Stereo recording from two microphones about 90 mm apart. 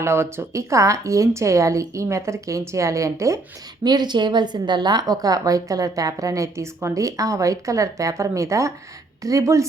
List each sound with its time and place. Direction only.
0.0 s a woman's voice: 30° right (ahead or behind)
3.8 s a woman's voice: 55° right (ahead or behind); by 9.6 s 35° right (ahead or behind)